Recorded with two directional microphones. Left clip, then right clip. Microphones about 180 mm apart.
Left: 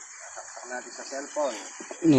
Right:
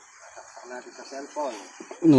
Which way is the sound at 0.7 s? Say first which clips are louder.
Left 3 dB; 15° left (ahead or behind).